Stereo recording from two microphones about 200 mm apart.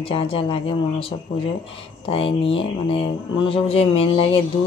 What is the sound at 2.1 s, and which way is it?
Speech, 30° left (ahead or behind).